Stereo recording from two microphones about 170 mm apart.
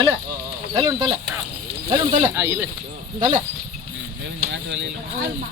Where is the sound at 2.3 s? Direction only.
15° right (ahead or behind).